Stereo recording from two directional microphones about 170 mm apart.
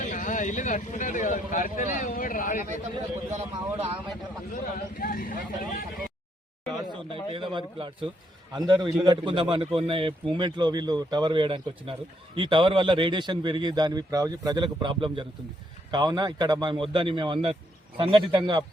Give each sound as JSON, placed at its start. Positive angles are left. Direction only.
{"t": 0.0, "sound": "speech", "side_deg": 50}
{"t": 3.2, "sound": "a man's voice", "side_deg": -40}
{"t": 4.5, "sound": "a man's voice", "side_deg": 55}
{"t": 7.1, "sound": "a man's voice", "side_deg": -30}